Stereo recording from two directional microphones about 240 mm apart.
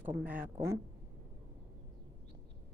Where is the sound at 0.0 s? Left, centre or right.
Centre.